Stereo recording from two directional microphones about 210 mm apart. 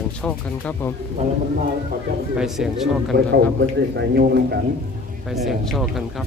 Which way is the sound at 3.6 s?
55° right (ahead or behind).